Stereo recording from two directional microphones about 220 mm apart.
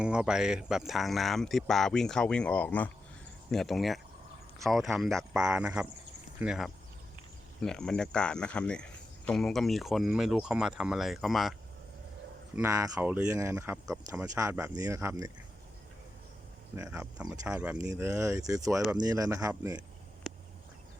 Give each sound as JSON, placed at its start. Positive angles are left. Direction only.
{"t": 0.0, "sound": "speech", "side_deg": -5}
{"t": 12.5, "sound": "speech", "side_deg": -15}
{"t": 16.7, "sound": "speech", "side_deg": -10}
{"t": 20.3, "sound": "a sound", "side_deg": 0}